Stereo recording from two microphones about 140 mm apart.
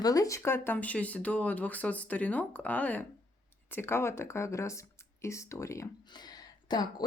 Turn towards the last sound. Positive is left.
turn(degrees=30)  # may be behind; listen again after turning